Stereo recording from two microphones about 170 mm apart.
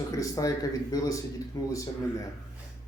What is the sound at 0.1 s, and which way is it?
Speech, 20° left (ahead or behind).